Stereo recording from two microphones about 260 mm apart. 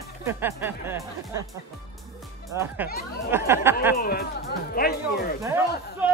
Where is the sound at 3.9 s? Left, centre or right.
Left.